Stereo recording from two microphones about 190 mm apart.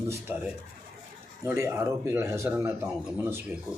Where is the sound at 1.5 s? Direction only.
15° right (ahead or behind).